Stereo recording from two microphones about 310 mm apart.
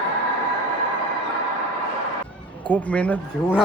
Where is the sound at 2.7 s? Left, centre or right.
Centre.